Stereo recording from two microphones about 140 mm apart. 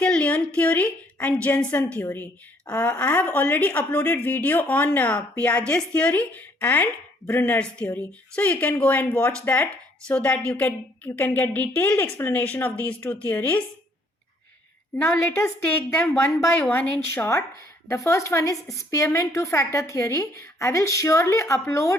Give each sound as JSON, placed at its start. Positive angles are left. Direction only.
{"t": 0.0, "sound": "a woman's voice", "side_deg": 10}
{"t": 16.0, "sound": "a woman's voice", "side_deg": 20}